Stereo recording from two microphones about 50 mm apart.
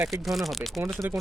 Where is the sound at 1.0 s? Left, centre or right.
Right.